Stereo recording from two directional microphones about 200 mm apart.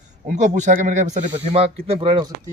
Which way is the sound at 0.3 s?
40° right (ahead or behind).